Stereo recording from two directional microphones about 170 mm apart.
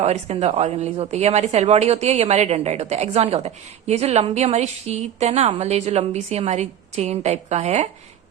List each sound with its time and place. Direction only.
0.0 s a woman's voice: 40° right (ahead or behind)